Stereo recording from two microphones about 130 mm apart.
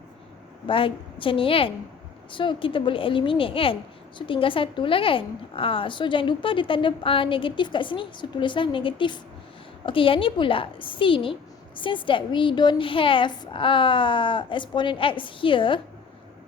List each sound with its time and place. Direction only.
0.7 s a woman's voice: 45° left (ahead or behind)